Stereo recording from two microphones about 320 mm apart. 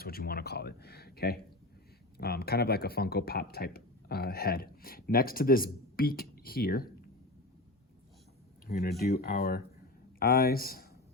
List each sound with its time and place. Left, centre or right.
0.0 s speech: left
8.6 s speech: left